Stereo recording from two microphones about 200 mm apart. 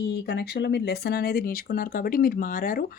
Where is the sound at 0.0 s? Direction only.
55° left (ahead or behind).